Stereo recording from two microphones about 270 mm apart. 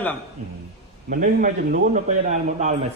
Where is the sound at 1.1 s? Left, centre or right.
Right.